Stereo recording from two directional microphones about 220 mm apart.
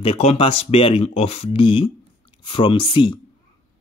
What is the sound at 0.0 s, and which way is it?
Speech, 30° left (ahead or behind).